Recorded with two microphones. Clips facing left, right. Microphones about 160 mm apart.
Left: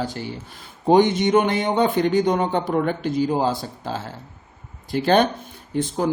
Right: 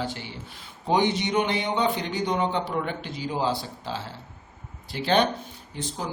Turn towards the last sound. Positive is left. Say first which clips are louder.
# left 11 dB
turn(degrees=55)  # may be behind; listen again after turning